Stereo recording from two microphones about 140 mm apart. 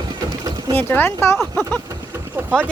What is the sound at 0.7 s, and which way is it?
Speech, 15° left (ahead or behind).